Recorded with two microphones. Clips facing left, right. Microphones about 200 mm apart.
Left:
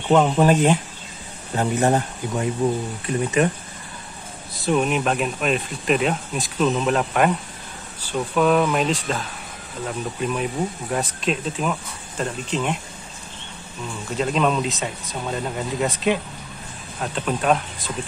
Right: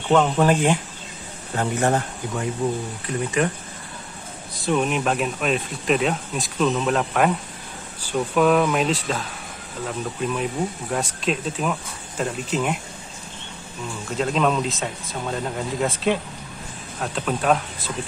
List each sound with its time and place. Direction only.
0.1 s speech: 15° left (ahead or behind)
4.6 s speech: centre (ahead or behind)
10.2 s speech: 5° left (ahead or behind)
14.1 s speech: centre (ahead or behind)
17.0 s speech: centre (ahead or behind)